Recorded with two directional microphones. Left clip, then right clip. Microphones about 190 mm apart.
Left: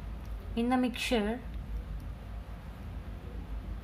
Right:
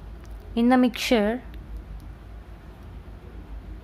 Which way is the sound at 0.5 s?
55° right (ahead or behind).